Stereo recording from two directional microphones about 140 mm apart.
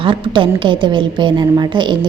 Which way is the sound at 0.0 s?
40° right (ahead or behind).